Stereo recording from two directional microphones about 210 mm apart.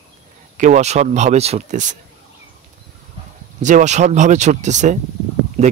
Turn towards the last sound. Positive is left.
turn(degrees=-30)  # may be behind; listen again after turning